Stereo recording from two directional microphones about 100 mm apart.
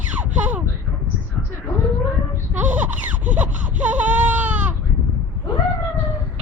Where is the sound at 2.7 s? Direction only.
15° right (ahead or behind).